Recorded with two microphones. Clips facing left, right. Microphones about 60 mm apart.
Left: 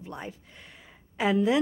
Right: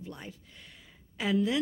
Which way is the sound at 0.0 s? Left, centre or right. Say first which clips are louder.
Left 5 dB; left.